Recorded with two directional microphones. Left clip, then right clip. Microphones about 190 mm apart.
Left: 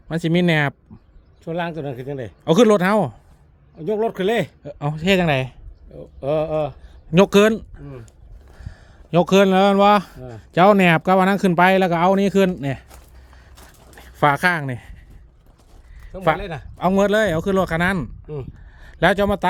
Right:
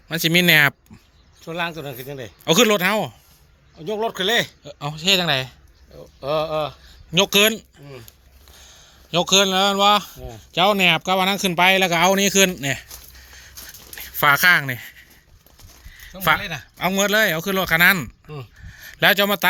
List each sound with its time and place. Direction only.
0.1 s speech: 15° left (ahead or behind)
1.5 s speech: 60° left (ahead or behind)
2.4 s speech: 20° left (ahead or behind)
3.8 s speech: 65° left (ahead or behind)
4.8 s speech: 40° left (ahead or behind)
6.1 s speech: 60° left (ahead or behind); by 12.9 s 20° left (ahead or behind)
13.9 s a sound: 15° left (ahead or behind)
16.9 s speech: 25° left (ahead or behind)
18.7 s a sound: 20° left (ahead or behind)